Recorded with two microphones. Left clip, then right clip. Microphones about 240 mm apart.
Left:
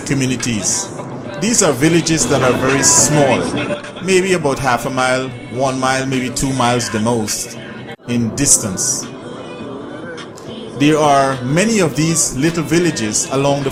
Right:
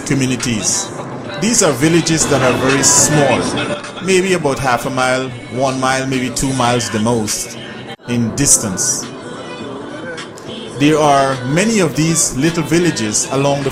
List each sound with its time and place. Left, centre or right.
0.1 s a man's voice: centre
2.8 s a man's voice: centre
10.8 s a man's voice: centre